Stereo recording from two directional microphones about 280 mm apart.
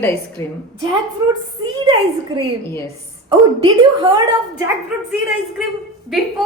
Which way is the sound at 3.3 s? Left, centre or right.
Centre.